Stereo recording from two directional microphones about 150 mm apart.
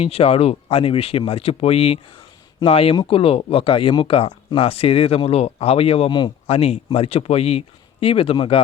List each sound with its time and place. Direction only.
0.0 s speech: 40° left (ahead or behind)